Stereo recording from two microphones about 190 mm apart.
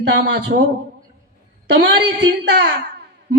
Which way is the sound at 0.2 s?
60° right (ahead or behind).